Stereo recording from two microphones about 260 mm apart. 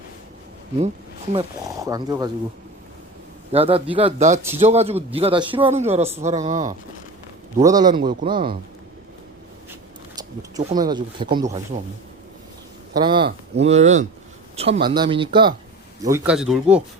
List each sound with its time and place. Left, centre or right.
1.3 s speech: centre
3.5 s a man's voice: right
7.6 s speech: centre
10.6 s speech: centre
12.9 s a man's voice: centre
16.0 s speech: centre